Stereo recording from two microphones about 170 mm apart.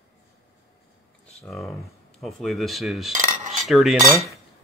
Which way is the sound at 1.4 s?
Centre (ahead or behind).